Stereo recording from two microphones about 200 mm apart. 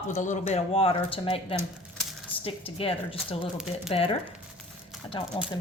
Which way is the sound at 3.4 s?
5° right (ahead or behind).